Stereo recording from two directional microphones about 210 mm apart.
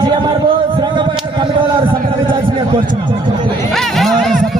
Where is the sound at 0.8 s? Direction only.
20° right (ahead or behind).